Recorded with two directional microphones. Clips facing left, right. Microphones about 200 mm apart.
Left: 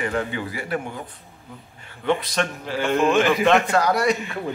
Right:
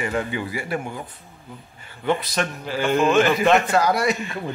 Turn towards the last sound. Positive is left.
turn(degrees=-5)  # may be behind; listen again after turning